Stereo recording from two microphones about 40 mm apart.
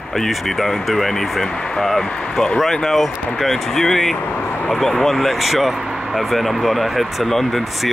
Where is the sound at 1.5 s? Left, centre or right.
Left.